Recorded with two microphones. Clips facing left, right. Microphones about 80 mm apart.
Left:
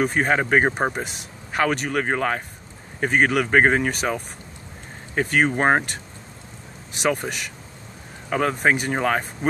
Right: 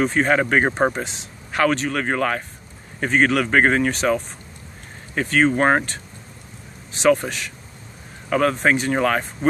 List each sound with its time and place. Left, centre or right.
0.0 s speech: centre
0.7 s speech: centre
1.6 s speech: left
7.0 s speech: centre
8.3 s speech: left